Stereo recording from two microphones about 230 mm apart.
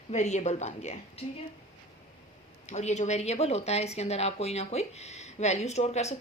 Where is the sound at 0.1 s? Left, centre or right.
Left.